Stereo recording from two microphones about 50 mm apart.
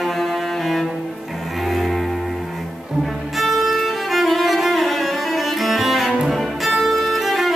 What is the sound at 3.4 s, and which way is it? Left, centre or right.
Violin, centre.